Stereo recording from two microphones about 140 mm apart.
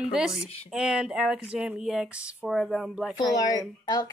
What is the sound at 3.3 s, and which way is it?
Speech, 25° left (ahead or behind).